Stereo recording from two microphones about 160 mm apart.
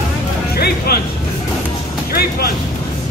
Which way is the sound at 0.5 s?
80° left.